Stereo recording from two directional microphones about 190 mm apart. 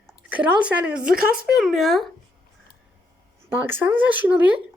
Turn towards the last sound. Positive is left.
turn(degrees=-10)  # may be behind; listen again after turning